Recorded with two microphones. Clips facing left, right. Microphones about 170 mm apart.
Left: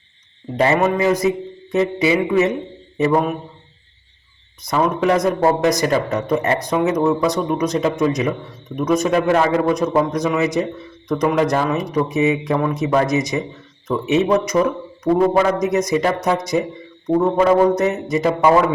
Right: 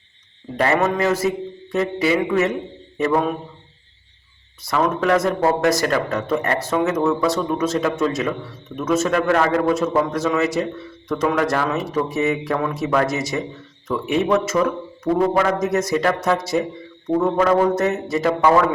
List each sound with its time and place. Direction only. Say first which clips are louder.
0.5 s speech: left 2 dB; 20° left (ahead or behind)
4.6 s speech: left 2 dB; 15° left (ahead or behind)
15.1 s a man's voice: left 3 dB; 5° left (ahead or behind)
15.6 s speech: left 2 dB; 20° left (ahead or behind)